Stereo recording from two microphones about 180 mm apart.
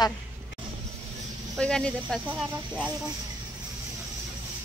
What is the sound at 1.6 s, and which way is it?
Speech, 5° left (ahead or behind).